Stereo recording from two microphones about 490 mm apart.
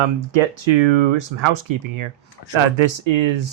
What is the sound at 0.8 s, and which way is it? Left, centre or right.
Speech, right.